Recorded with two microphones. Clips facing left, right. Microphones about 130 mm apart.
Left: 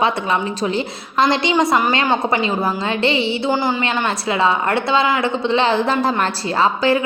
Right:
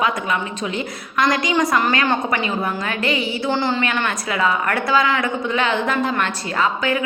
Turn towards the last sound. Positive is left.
turn(degrees=30)  # may be behind; listen again after turning